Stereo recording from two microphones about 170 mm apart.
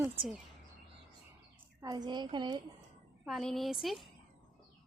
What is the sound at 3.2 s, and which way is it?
Speech, centre (ahead or behind).